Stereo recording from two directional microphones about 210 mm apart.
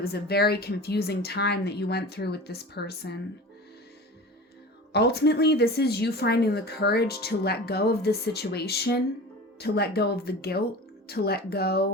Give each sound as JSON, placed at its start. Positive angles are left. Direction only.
{"t": 0.0, "sound": "speech", "side_deg": 50}
{"t": 4.9, "sound": "speech", "side_deg": 50}